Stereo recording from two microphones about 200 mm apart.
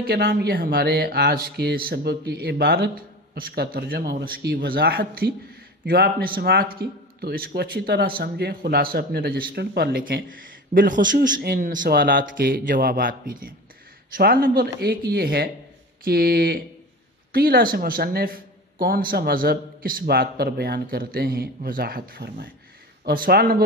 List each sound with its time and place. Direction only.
0.0 s speech: 50° right (ahead or behind)